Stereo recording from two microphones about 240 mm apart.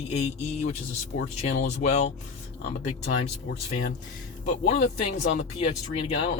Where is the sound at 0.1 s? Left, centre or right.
Left.